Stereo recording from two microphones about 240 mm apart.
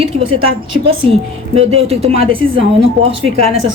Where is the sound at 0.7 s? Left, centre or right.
Right.